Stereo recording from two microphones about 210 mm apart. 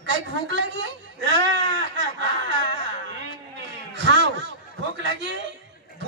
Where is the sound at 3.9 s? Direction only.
55° right (ahead or behind).